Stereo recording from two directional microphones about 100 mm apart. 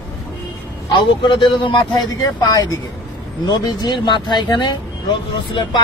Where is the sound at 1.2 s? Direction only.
55° left (ahead or behind).